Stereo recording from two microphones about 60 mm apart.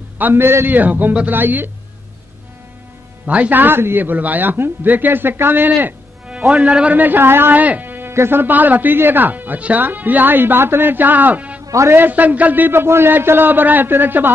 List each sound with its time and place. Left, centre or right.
0.2 s speech: right
0.7 s speech: right
3.3 s speech: right
7.6 s music: right
8.1 s speech: right
11.6 s music: right
11.9 s speech: right